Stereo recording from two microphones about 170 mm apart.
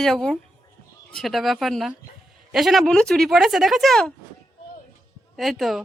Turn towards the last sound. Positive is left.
turn(degrees=0)  # may be behind; listen again after turning